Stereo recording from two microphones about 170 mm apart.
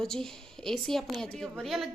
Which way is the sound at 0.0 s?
5° left (ahead or behind).